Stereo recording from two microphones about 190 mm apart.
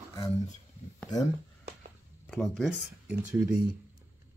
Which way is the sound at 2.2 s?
Centre (ahead or behind).